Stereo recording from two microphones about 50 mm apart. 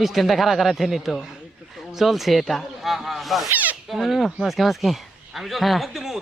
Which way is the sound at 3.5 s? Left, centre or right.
Right.